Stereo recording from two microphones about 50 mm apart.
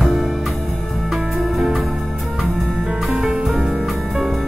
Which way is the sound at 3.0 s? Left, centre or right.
Centre.